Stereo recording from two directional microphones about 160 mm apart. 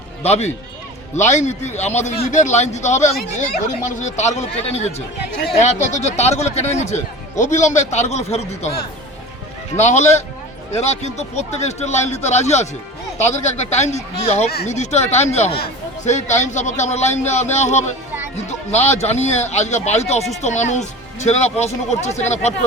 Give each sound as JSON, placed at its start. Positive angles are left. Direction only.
{"t": 0.2, "sound": "speech", "side_deg": 40}
{"t": 9.7, "sound": "speech", "side_deg": 45}